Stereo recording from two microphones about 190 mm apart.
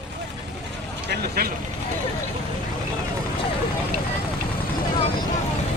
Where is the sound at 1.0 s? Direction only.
55° right (ahead or behind).